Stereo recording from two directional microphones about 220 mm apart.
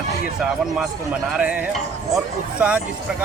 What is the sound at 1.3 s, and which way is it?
Speech, 5° right (ahead or behind).